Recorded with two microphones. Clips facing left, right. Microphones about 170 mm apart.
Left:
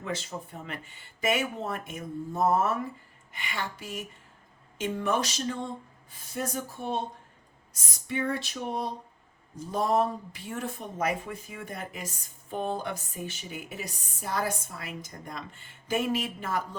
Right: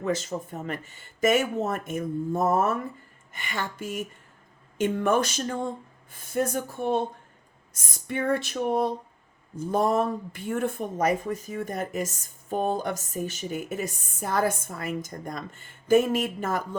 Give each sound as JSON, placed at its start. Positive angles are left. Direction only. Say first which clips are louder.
{"t": 0.0, "sound": "speech", "louder": "right 7 dB", "side_deg": -45}